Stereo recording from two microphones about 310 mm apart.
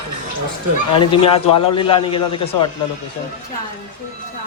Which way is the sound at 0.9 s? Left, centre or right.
Centre.